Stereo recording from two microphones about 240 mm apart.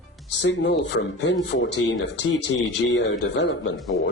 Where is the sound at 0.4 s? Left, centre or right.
Left.